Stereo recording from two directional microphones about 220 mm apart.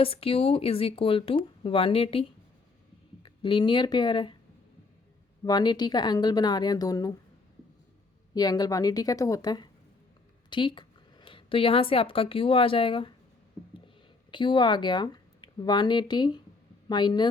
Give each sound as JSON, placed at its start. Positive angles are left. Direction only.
{"t": 0.0, "sound": "speech", "side_deg": 25}
{"t": 3.2, "sound": "speech", "side_deg": 20}
{"t": 5.5, "sound": "speech", "side_deg": 20}
{"t": 8.4, "sound": "speech", "side_deg": 20}